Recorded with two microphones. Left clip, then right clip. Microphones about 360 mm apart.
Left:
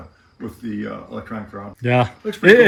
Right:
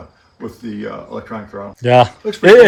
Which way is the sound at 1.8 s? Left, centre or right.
Centre.